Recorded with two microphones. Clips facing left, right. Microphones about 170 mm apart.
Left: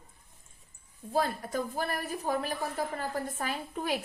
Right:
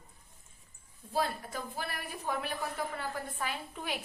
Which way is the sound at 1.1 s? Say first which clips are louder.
Left 4 dB; 50° left (ahead or behind).